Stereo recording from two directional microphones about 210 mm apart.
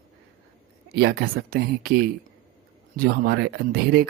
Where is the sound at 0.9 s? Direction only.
50° right (ahead or behind).